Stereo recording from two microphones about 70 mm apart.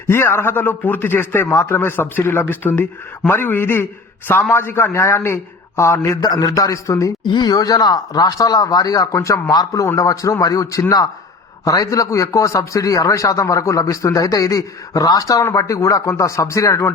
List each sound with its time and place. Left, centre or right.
0.1 s a man's voice: left
6.2 s speech: left
7.3 s speech: left
9.1 s a man's voice: left
9.5 s speech: left
10.0 s a man's voice: left